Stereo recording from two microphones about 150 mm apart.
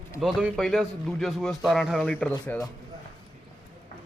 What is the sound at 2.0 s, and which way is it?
Speech, 10° left (ahead or behind).